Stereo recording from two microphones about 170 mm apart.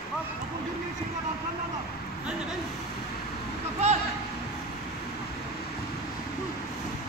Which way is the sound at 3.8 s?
40° right (ahead or behind).